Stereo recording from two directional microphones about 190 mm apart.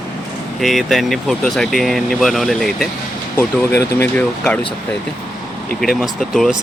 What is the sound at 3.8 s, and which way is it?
Speech, 10° left (ahead or behind).